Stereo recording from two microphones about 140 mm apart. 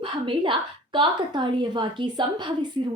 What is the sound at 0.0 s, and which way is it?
A woman's voice, 35° right (ahead or behind).